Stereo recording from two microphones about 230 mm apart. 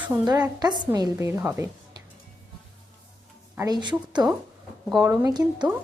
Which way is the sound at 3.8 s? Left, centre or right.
Centre.